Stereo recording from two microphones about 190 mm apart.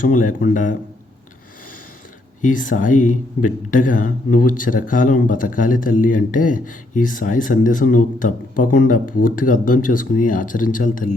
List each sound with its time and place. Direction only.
0.0 s speech: 45° left (ahead or behind)
2.4 s speech: 45° left (ahead or behind)